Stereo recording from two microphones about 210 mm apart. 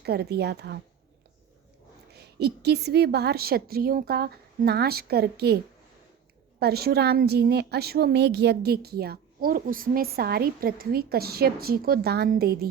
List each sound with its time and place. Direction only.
0.0 s a woman's voice: 50° right (ahead or behind)
2.1 s a woman's voice: 50° right (ahead or behind)
6.6 s a woman's voice: 50° right (ahead or behind)